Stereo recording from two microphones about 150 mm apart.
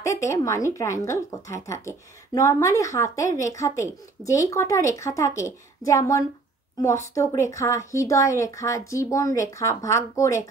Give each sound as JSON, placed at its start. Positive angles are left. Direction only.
{"t": 0.0, "sound": "speech", "side_deg": 20}